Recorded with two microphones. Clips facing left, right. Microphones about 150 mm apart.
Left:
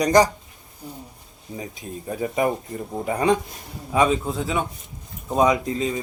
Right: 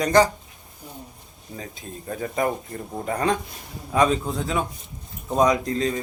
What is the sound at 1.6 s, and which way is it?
A man's voice, 15° left (ahead or behind).